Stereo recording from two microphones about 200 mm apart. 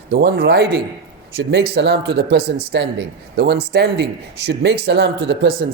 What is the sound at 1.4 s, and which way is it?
Speech, 60° right (ahead or behind).